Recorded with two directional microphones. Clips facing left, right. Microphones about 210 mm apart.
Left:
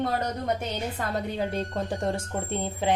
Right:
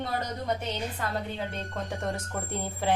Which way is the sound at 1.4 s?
35° left (ahead or behind).